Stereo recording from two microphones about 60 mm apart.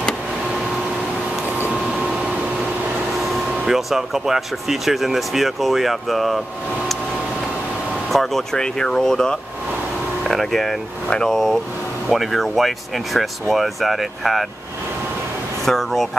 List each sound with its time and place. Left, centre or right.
3.2 s speech: centre
8.1 s speech: centre
15.6 s speech: centre